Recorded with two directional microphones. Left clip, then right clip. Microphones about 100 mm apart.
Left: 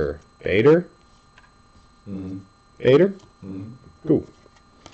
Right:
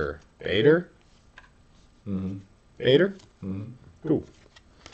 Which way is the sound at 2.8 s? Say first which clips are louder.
Left 5 dB; 15° left (ahead or behind).